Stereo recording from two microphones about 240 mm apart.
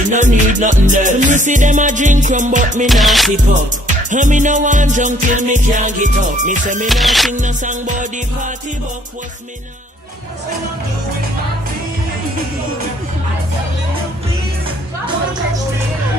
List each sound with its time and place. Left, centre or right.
0.1 s music: right
2.9 s music: centre
3.8 s music: right
6.9 s music: centre
7.3 s music: right